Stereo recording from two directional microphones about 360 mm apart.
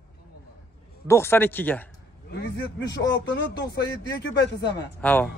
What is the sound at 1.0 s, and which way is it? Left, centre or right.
Speech, centre.